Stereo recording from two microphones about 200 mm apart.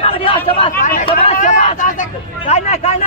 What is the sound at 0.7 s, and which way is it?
Speech, 45° left (ahead or behind).